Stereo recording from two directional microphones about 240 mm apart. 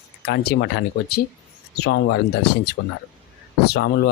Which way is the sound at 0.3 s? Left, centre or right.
Left.